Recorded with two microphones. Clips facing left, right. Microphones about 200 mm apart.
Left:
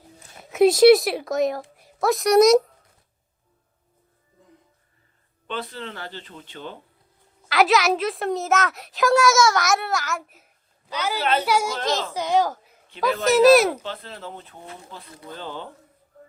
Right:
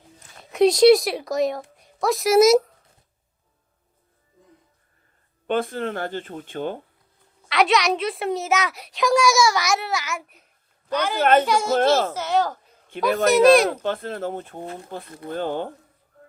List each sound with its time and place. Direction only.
0.3 s speech: 5° left (ahead or behind)
5.5 s speech: 50° right (ahead or behind)
7.4 s a woman's voice: centre (ahead or behind)
11.2 s speech: 50° right (ahead or behind)
11.4 s a woman's voice: 10° left (ahead or behind)
13.8 s speech: 50° right (ahead or behind)